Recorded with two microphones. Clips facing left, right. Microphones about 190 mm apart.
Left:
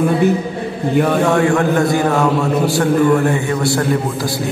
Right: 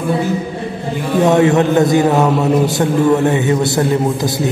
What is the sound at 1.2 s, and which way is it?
A man's voice, 20° right (ahead or behind).